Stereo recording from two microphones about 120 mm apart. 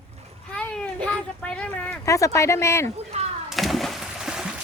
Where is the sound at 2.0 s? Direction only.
25° left (ahead or behind).